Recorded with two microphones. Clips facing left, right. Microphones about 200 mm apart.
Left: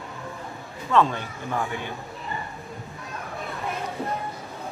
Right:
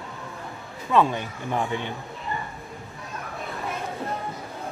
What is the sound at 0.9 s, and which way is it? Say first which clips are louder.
Speech: even; 15° right (ahead or behind).